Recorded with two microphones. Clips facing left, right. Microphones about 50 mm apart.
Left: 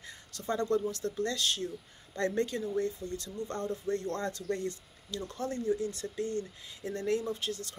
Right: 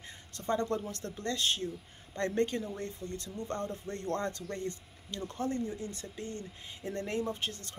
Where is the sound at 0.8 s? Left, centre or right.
Right.